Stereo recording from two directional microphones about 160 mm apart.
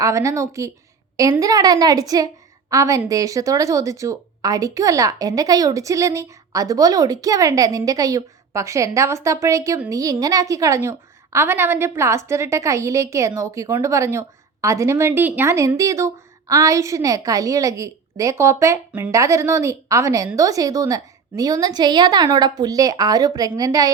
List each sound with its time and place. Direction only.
0.0 s a woman's voice: 20° right (ahead or behind)